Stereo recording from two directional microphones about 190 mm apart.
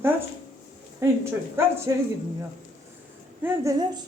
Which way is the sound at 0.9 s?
15° right (ahead or behind).